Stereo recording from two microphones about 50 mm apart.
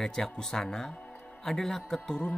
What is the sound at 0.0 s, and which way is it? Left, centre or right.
A man's voice, centre.